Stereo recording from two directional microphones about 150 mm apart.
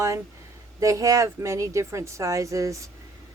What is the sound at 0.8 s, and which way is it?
Speech, 20° right (ahead or behind).